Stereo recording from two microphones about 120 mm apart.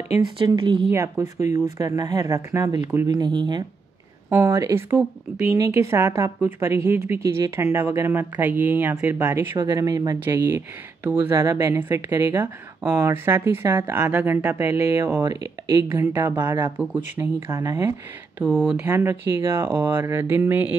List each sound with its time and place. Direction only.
0.6 s speech: 45° right (ahead or behind)
0.9 s speech: 25° right (ahead or behind)
3.1 s speech: 40° right (ahead or behind)
4.3 s speech: 20° right (ahead or behind)
9.5 s speech: 40° right (ahead or behind)
9.8 s speech: 30° right (ahead or behind)
10.2 s speech: 20° right (ahead or behind)
15.1 s speech: 35° right (ahead or behind)
15.9 s speech: 15° right (ahead or behind)
17.5 s speech: 25° right (ahead or behind)
18.4 s speech: 15° right (ahead or behind)